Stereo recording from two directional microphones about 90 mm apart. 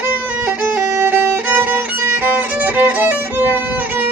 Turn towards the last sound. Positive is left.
turn(degrees=-20)  # may be behind; listen again after turning